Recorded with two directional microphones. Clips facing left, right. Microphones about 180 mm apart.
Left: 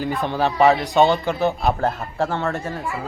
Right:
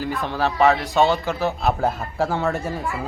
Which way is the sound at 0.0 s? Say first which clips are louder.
Left 2 dB; centre (ahead or behind).